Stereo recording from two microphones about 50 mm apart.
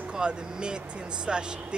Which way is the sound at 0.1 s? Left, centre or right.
Centre.